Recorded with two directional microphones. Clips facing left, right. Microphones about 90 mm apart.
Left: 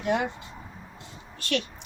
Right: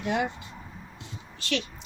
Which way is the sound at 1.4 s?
50° left (ahead or behind).